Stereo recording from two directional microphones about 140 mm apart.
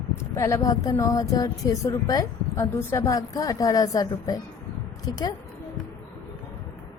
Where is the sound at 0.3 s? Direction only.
20° left (ahead or behind).